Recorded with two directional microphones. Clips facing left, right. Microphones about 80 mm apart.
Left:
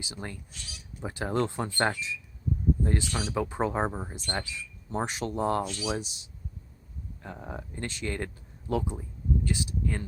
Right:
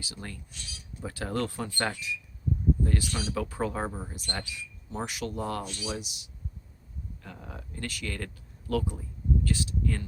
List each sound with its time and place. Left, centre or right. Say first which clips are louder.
0.0 s speech: left 2 dB; left